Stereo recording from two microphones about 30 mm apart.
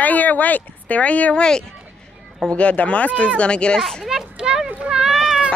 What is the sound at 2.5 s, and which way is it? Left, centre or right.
Speech, left.